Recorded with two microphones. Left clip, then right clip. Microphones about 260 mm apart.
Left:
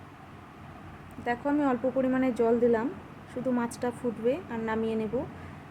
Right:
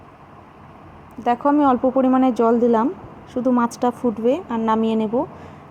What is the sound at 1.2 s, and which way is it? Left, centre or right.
Speech, right.